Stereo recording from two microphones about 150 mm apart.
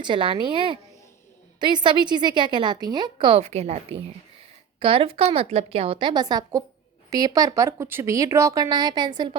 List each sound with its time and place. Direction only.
0.0 s a woman's voice: 35° right (ahead or behind)